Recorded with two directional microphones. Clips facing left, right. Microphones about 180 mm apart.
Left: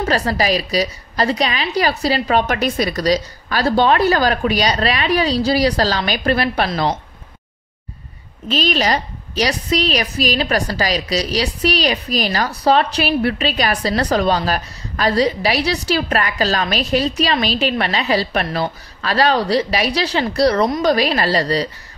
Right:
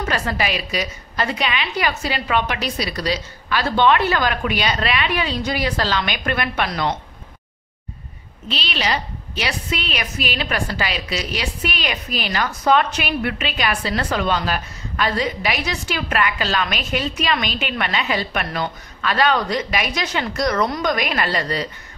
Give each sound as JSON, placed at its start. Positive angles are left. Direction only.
{"t": 0.0, "sound": "a woman's voice", "side_deg": 35}
{"t": 8.5, "sound": "a woman's voice", "side_deg": 45}